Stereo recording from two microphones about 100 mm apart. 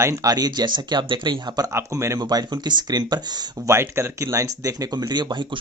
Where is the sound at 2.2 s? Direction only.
40° right (ahead or behind).